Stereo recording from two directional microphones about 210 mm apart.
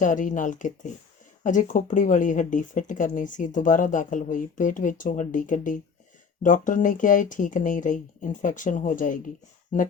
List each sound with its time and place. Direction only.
0.0 s speech: 40° left (ahead or behind)